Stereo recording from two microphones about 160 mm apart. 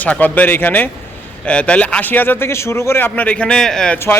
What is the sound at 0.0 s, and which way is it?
A man's voice, 10° left (ahead or behind).